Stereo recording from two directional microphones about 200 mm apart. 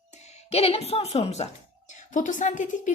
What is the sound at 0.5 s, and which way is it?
A woman's voice, 30° left (ahead or behind).